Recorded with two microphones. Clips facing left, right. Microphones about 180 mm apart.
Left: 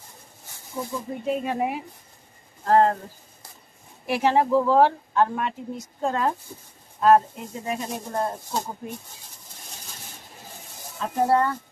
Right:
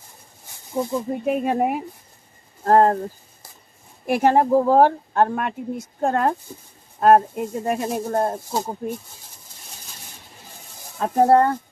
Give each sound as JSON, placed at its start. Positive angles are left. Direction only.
{"t": 1.2, "sound": "speech", "side_deg": -55}
{"t": 4.0, "sound": "speech", "side_deg": -50}
{"t": 11.0, "sound": "speech", "side_deg": -50}